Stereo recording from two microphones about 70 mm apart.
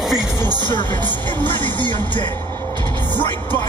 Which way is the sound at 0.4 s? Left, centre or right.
Right.